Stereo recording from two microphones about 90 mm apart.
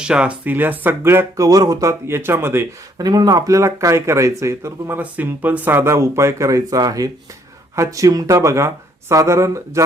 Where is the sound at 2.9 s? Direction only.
50° right (ahead or behind); by 4.9 s 35° right (ahead or behind).